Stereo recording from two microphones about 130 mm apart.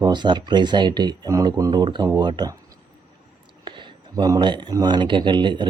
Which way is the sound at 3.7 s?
35° right (ahead or behind).